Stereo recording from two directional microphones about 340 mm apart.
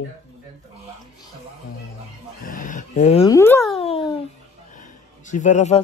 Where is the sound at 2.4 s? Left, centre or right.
Left.